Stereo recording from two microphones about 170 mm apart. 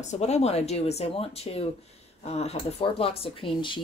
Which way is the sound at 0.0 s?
40° left (ahead or behind).